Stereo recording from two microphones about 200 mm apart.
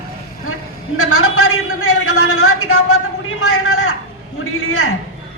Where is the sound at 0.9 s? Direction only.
90° left.